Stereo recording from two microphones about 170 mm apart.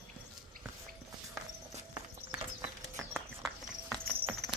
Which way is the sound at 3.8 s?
Centre (ahead or behind).